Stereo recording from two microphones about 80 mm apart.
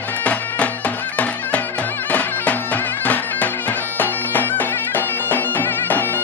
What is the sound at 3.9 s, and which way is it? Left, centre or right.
Bagpipes, left.